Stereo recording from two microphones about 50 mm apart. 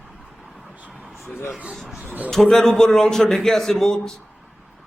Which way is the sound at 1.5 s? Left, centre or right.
Right.